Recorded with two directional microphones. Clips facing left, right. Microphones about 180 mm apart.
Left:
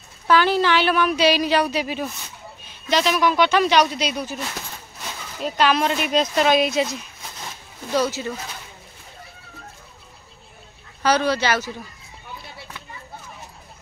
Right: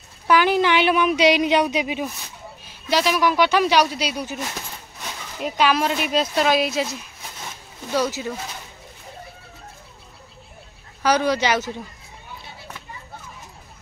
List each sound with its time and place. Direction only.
0.3 s speech: 15° right (ahead or behind)
5.4 s speech: 10° right (ahead or behind)
7.4 s a sound: centre (ahead or behind)
8.0 s speech: 10° right (ahead or behind)
11.0 s speech: 15° right (ahead or behind)